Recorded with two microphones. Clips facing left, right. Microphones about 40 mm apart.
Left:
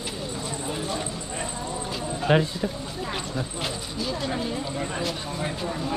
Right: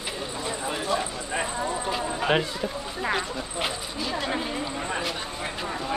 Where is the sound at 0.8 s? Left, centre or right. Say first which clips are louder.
Right 3 dB; right.